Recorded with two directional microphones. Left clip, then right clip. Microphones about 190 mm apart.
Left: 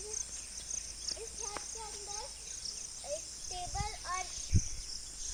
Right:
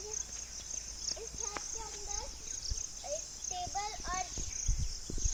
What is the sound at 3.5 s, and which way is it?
Speech, 40° left (ahead or behind).